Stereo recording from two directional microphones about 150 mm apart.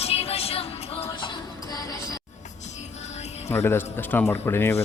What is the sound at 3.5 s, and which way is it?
Speech, 15° left (ahead or behind).